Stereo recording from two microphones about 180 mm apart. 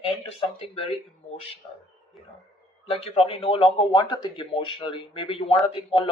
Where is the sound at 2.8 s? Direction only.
35° left (ahead or behind).